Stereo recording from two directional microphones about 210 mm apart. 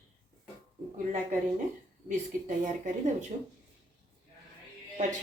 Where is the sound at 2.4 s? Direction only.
35° right (ahead or behind).